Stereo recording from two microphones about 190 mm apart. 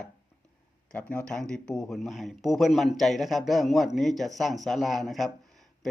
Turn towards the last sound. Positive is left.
turn(degrees=0)  # may be behind; listen again after turning